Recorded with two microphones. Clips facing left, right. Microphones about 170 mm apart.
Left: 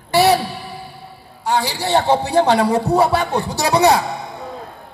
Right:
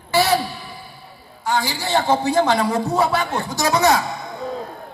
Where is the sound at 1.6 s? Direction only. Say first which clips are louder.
Left 3 dB; 65° left (ahead or behind).